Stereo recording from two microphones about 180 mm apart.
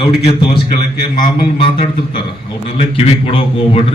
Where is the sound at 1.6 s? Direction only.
30° left (ahead or behind).